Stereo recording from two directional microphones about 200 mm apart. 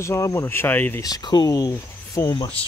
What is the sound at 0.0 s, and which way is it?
Speech, 15° left (ahead or behind).